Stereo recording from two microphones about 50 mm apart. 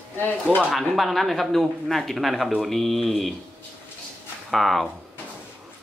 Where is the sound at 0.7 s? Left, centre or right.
Centre.